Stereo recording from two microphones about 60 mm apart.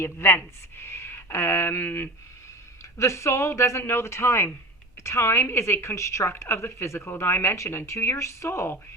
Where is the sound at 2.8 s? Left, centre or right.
Left.